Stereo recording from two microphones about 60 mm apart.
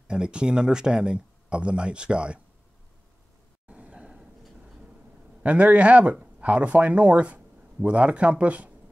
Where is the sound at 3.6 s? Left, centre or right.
Centre.